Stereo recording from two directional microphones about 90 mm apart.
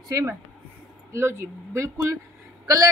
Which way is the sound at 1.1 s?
30° right (ahead or behind).